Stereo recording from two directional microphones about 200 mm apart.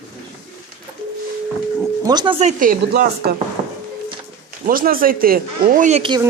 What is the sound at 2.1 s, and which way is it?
Speech, 20° right (ahead or behind).